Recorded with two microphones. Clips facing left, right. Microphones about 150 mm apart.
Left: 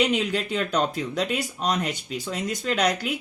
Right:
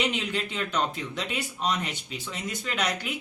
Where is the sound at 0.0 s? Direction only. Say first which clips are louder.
Left 6 dB; 45° left (ahead or behind).